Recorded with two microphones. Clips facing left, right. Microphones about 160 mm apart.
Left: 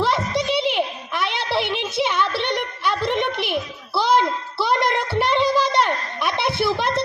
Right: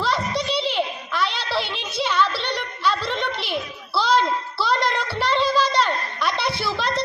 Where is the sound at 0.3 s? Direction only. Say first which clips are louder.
Left 3 dB; 55° left (ahead or behind).